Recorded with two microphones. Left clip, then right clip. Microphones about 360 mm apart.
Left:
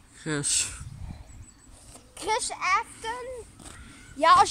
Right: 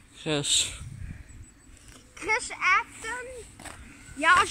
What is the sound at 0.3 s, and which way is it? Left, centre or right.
Speech, centre.